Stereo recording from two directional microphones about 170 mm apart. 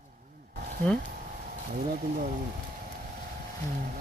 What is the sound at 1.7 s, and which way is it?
Speech, 50° right (ahead or behind).